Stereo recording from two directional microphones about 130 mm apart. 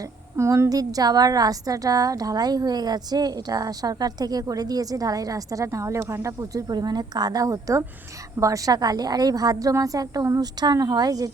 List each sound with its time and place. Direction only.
0.3 s a woman's voice: 20° right (ahead or behind)